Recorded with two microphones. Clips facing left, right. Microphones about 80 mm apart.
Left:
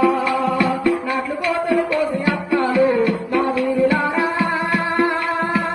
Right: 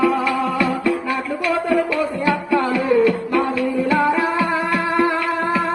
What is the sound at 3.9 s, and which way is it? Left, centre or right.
Music, left.